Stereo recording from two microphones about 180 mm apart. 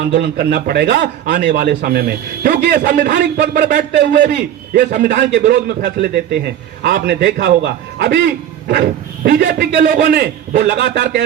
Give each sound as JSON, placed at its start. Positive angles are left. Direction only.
{"t": 0.1, "sound": "a man's voice", "side_deg": -60}
{"t": 5.1, "sound": "a man's voice", "side_deg": -70}
{"t": 9.8, "sound": "a man's voice", "side_deg": -55}